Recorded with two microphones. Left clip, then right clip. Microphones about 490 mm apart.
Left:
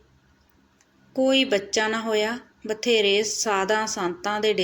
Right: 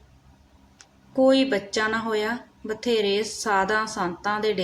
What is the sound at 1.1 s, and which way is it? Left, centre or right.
Speech, right.